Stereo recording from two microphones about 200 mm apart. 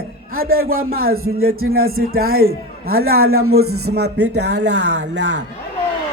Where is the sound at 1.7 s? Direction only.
50° right (ahead or behind).